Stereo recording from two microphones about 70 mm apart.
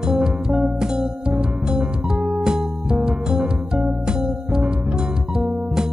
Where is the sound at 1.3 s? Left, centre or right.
Centre.